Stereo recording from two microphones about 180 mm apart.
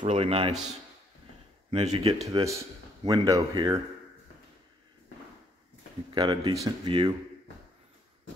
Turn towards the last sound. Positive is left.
turn(degrees=-25)  # may be behind; listen again after turning